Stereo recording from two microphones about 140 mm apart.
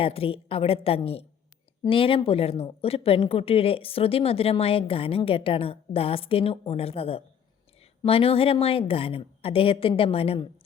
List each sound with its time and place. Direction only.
0.0 s speech: 45° left (ahead or behind)